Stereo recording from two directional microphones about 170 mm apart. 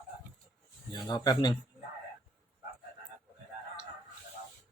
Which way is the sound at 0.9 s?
25° left (ahead or behind).